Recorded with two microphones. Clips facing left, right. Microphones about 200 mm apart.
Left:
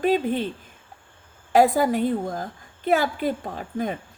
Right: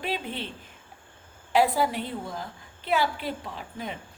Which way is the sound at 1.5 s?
45° left (ahead or behind).